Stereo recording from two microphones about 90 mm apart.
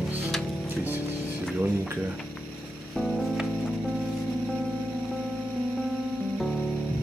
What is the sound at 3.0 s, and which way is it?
Music, 5° right (ahead or behind).